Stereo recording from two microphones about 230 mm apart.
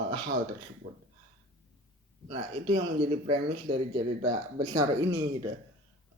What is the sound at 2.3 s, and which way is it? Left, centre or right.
Speech, right.